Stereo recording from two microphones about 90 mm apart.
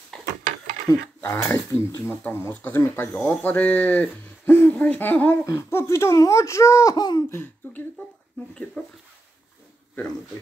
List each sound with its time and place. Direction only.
0.1 s a sound: 5° left (ahead or behind)
0.9 s speech: 40° left (ahead or behind)
1.2 s speech: 25° left (ahead or behind)
5.4 s speech: 30° left (ahead or behind)
7.0 s laughter: 50° left (ahead or behind)
7.2 s speech: 25° left (ahead or behind)
8.8 s speech: 10° left (ahead or behind)